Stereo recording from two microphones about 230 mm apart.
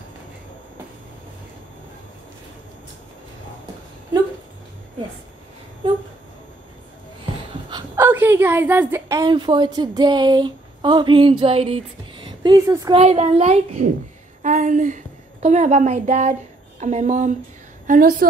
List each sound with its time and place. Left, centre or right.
7.7 s a woman's voice: centre
13.0 s a woman's voice: right